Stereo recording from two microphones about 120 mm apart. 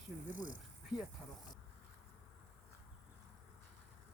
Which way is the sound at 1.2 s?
5° left (ahead or behind).